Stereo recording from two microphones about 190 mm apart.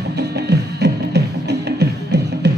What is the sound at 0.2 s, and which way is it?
Music, 60° right (ahead or behind).